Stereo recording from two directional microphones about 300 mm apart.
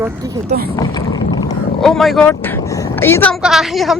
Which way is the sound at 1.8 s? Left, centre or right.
Centre.